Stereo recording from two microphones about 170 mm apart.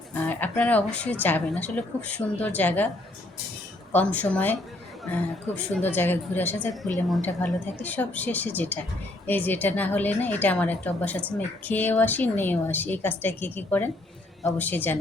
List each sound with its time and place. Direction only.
0.1 s speech: 10° left (ahead or behind)
3.9 s speech: 10° left (ahead or behind)